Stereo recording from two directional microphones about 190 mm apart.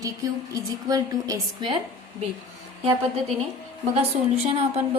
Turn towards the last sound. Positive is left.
turn(degrees=-30)  # may be behind; listen again after turning